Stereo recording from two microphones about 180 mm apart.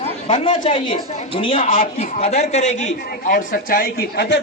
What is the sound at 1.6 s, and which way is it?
A man's voice, 45° left (ahead or behind).